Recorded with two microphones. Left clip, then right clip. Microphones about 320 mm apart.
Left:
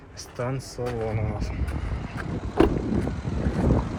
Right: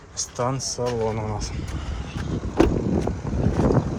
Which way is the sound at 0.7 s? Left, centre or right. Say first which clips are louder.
Right 5 dB; centre.